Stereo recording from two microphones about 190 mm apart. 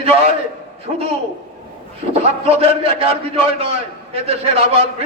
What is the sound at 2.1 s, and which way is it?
A man's voice, 35° right (ahead or behind).